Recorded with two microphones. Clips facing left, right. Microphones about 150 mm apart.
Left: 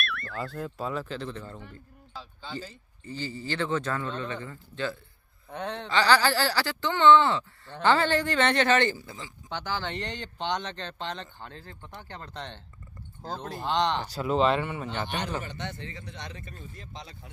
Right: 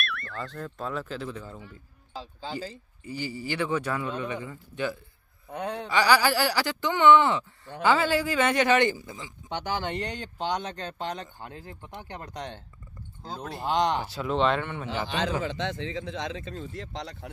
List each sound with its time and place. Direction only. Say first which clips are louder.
0.0 s a sound: left 1 dB; centre (ahead or behind)
3.0 s speech: right 2 dB; 15° right (ahead or behind)
14.1 s speech: left 1 dB; 5° left (ahead or behind)
15.0 s speech: right 4 dB; 90° right; by 17.3 s 70° right (ahead or behind)